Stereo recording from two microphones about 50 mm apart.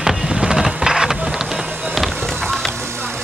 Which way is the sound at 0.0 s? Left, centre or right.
Centre.